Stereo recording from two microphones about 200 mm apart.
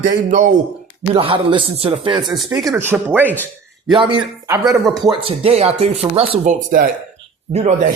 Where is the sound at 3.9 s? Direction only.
25° right (ahead or behind).